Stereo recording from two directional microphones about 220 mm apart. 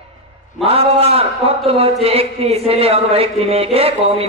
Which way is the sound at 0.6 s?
25° right (ahead or behind).